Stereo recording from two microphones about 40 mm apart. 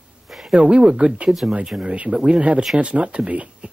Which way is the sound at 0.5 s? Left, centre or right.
Right.